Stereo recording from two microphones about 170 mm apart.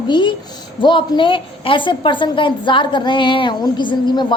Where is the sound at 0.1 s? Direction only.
25° left (ahead or behind).